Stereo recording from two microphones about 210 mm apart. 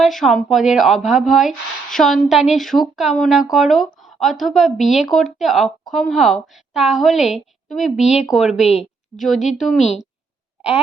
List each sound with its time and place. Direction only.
0.0 s speech: centre (ahead or behind)
8.0 s speech: 30° left (ahead or behind)
8.3 s a woman's voice: centre (ahead or behind)